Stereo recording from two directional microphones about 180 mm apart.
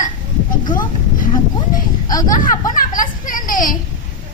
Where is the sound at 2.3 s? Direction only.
50° left (ahead or behind).